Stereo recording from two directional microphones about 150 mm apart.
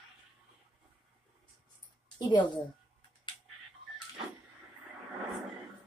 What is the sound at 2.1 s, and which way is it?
Speech, 30° left (ahead or behind).